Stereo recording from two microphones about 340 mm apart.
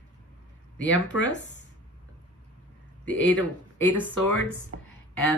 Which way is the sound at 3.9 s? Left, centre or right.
Centre.